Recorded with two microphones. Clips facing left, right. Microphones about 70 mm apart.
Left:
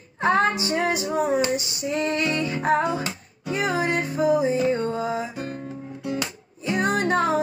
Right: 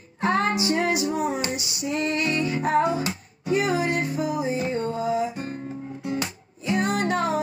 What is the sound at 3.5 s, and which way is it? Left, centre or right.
Music, left.